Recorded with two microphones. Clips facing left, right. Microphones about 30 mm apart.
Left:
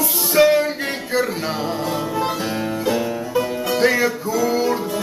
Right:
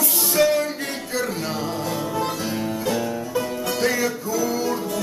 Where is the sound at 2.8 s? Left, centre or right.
Centre.